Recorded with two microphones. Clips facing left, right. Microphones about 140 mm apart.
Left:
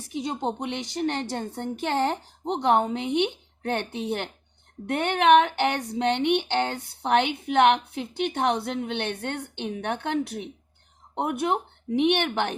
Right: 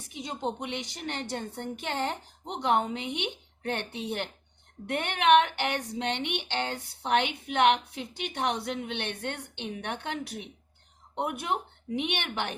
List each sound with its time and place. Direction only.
0.2 s a woman's voice: 40° left (ahead or behind)